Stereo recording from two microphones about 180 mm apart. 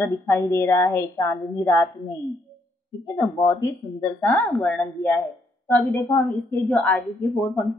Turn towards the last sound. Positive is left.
turn(degrees=5)  # may be behind; listen again after turning